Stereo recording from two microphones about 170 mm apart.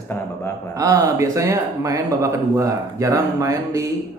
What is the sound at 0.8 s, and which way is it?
Speech, 20° right (ahead or behind).